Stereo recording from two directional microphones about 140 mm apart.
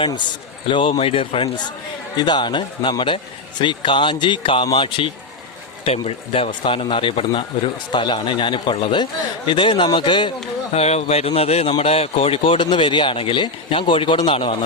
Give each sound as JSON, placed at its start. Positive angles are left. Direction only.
{"t": 0.7, "sound": "speech", "side_deg": 40}
{"t": 10.7, "sound": "a man's voice", "side_deg": 50}